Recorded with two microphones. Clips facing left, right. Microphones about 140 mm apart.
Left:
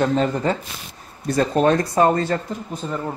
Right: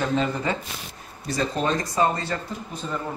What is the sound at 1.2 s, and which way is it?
Speech, 55° left (ahead or behind).